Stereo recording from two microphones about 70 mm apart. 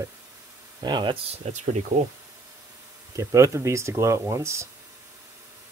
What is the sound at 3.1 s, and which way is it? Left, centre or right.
Speech, right.